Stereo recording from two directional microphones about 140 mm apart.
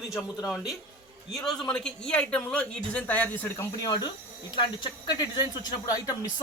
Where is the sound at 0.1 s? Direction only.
Centre (ahead or behind); by 3.9 s 15° left (ahead or behind).